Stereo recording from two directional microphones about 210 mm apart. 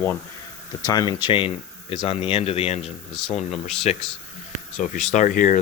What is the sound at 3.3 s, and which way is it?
Speech, 30° left (ahead or behind).